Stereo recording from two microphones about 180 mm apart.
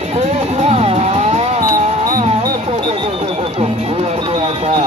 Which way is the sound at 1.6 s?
50° right (ahead or behind).